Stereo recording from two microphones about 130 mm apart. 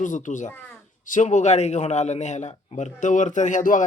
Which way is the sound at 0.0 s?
75° left (ahead or behind).